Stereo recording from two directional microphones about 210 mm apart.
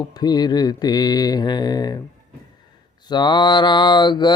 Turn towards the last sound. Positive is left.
turn(degrees=20)  # may be behind; listen again after turning